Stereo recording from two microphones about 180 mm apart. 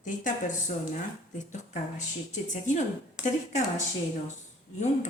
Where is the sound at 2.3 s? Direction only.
40° left (ahead or behind).